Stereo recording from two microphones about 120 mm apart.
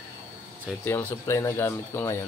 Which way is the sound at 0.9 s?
15° left (ahead or behind).